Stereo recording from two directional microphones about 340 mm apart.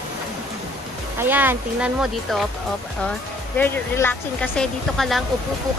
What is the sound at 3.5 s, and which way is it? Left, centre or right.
Speech, centre.